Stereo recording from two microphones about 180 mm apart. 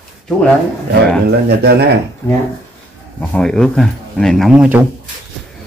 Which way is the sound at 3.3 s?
5° left (ahead or behind).